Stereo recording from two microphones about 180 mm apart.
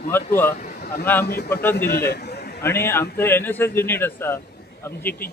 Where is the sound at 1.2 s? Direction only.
60° left (ahead or behind).